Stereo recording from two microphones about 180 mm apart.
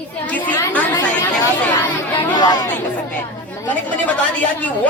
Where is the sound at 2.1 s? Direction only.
25° left (ahead or behind).